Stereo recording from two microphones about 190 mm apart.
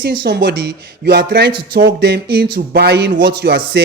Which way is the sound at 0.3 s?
60° right (ahead or behind).